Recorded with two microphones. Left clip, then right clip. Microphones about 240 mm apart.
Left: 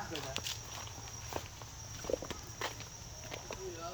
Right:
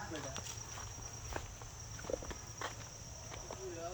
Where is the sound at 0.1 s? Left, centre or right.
Left.